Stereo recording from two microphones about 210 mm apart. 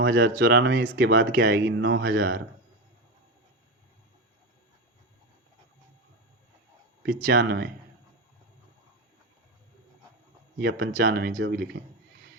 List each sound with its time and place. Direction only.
0.0 s speech: 55° right (ahead or behind)
7.0 s speech: 45° right (ahead or behind)
10.6 s speech: 60° right (ahead or behind)